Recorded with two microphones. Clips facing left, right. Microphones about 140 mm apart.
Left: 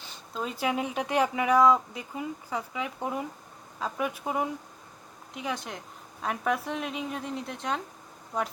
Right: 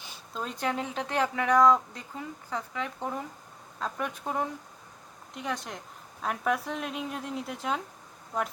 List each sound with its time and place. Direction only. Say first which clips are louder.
0.3 s speech: left 2 dB; 5° left (ahead or behind)